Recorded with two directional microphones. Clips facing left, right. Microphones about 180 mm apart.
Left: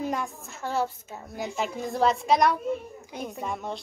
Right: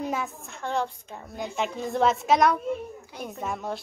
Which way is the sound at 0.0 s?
Centre (ahead or behind).